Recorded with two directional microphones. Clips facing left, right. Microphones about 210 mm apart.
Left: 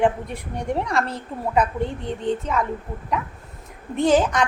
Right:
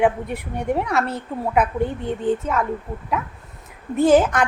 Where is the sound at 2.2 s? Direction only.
5° right (ahead or behind).